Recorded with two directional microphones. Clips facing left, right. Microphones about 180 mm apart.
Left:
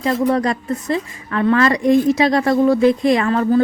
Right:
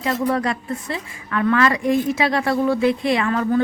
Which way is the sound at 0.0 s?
35° left (ahead or behind).